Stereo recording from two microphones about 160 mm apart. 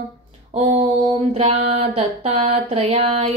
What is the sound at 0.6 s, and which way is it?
Mantra, 50° right (ahead or behind).